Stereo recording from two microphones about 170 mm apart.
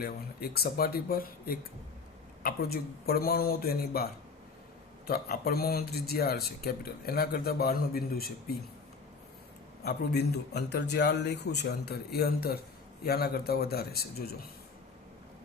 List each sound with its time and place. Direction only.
0.0 s a man's voice: 65° left (ahead or behind)
2.4 s a man's voice: 65° left (ahead or behind)
9.8 s a man's voice: 80° left